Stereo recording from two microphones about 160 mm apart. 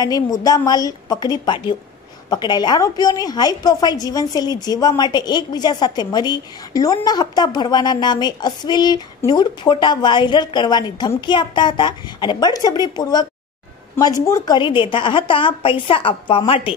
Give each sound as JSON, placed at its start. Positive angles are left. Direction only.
{"t": 0.0, "sound": "a woman's voice", "side_deg": 25}